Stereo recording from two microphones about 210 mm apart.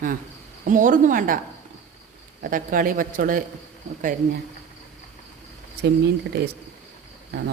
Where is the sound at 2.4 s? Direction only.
40° right (ahead or behind).